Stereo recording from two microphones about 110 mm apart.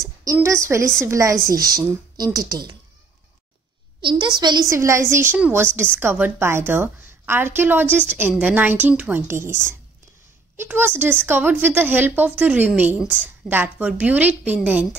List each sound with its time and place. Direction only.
0.0 s a woman's voice: 30° right (ahead or behind)
4.0 s a child's voice: 45° right (ahead or behind)
4.6 s a woman's voice: 25° right (ahead or behind); by 15.0 s 10° right (ahead or behind)